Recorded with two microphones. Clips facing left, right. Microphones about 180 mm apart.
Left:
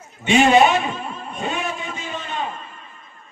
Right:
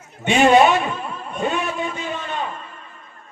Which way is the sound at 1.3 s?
55° right (ahead or behind).